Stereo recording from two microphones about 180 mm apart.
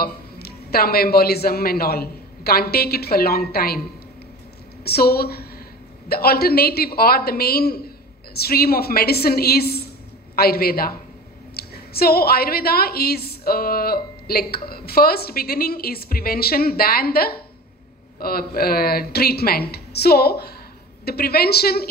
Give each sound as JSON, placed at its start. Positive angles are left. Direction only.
{"t": 0.0, "sound": "a man's voice", "side_deg": 60}
{"t": 4.8, "sound": "a woman's voice", "side_deg": 60}